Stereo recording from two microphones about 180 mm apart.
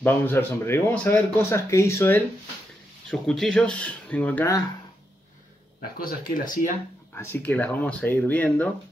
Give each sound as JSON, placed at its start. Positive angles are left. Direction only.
{"t": 0.0, "sound": "speech", "side_deg": 10}
{"t": 3.1, "sound": "speech", "side_deg": 5}
{"t": 5.8, "sound": "speech", "side_deg": 55}
{"t": 7.2, "sound": "speech", "side_deg": 10}